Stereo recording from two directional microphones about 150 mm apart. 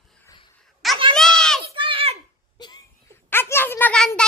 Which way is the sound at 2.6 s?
30° left (ahead or behind).